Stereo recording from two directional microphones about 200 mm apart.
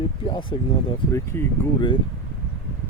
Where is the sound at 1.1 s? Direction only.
15° left (ahead or behind).